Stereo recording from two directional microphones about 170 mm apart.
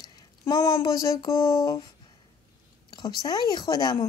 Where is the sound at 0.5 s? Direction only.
15° left (ahead or behind).